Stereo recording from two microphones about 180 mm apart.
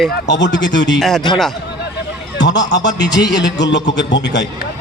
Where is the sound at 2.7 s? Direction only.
75° left (ahead or behind).